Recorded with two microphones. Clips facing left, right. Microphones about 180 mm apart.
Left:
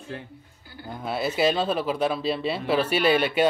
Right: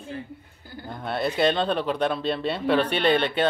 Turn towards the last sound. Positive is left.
turn(degrees=10)  # may be behind; listen again after turning